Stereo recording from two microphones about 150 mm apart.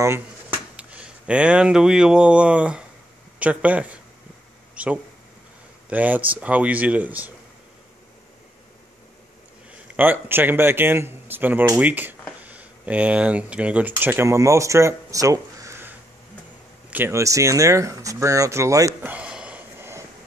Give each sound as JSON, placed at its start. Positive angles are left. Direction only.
{"t": 0.0, "sound": "speech", "side_deg": -15}
{"t": 9.9, "sound": "speech", "side_deg": -10}
{"t": 16.9, "sound": "speech", "side_deg": -15}
{"t": 19.1, "sound": "a sound", "side_deg": -5}